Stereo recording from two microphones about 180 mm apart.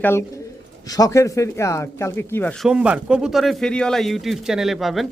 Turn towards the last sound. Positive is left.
turn(degrees=0)  # may be behind; listen again after turning